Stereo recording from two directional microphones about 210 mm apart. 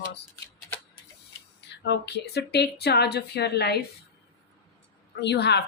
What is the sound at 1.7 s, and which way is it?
Speech, 55° left (ahead or behind).